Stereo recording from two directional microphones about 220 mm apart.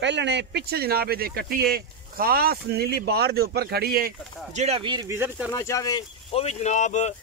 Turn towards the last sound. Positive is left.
turn(degrees=35)  # may be behind; listen again after turning